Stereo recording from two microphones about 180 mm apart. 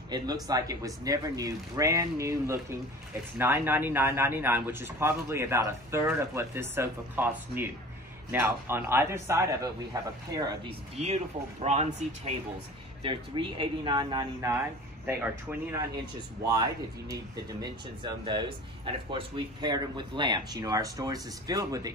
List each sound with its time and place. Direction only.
0.1 s a man's voice: 20° right (ahead or behind)
17.1 s speech: 20° right (ahead or behind)